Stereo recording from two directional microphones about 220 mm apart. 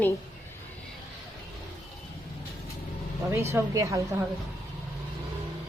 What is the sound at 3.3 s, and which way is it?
Speech, 10° right (ahead or behind).